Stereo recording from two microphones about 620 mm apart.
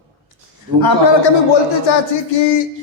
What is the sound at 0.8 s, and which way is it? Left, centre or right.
Speech, left.